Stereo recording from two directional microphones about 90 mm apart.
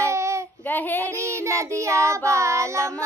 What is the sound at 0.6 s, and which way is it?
Child singing, 20° left (ahead or behind).